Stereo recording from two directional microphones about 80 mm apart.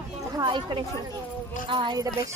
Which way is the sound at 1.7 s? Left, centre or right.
Right.